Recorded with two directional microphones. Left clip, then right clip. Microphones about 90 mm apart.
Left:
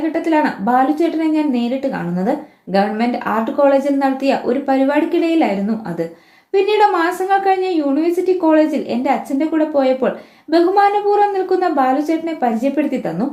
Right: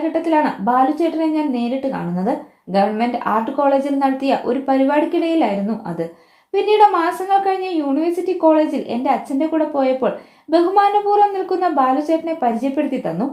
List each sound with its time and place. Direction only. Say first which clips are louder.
0.1 s a woman's voice: even; 30° right (ahead or behind)
2.7 s a woman's voice: even; 35° right (ahead or behind)